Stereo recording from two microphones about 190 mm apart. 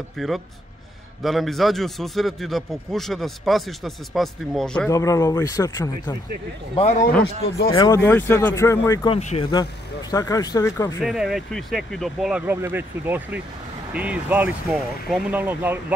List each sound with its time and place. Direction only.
0.2 s a man's voice: centre (ahead or behind)
4.8 s speech: 15° left (ahead or behind)
6.7 s speech: 35° left (ahead or behind)
7.7 s speech: 20° left (ahead or behind)
9.1 s speech: 30° left (ahead or behind)
10.1 s speech: 20° left (ahead or behind)
11.1 s a man's voice: centre (ahead or behind)